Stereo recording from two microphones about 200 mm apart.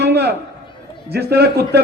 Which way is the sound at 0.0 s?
55° right (ahead or behind).